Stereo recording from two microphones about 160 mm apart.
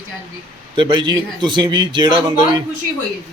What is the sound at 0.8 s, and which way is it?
Speech, 30° right (ahead or behind).